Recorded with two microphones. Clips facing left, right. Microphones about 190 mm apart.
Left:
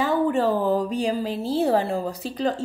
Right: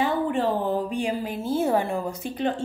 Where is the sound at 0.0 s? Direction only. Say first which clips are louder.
Left 3 dB; 40° left (ahead or behind).